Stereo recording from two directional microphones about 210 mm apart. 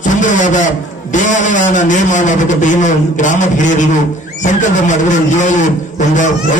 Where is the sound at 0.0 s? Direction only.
35° left (ahead or behind).